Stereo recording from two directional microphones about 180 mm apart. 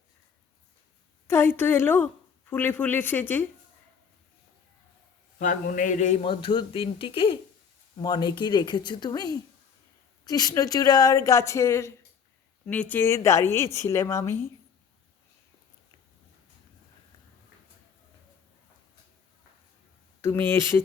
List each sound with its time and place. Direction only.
1.3 s speech: 15° left (ahead or behind)
5.4 s a man's voice: 45° left (ahead or behind)
6.2 s speech: 30° left (ahead or behind)
20.2 s speech: 15° left (ahead or behind)